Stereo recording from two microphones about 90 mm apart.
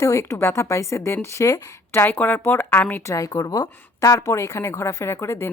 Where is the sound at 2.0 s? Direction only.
20° left (ahead or behind).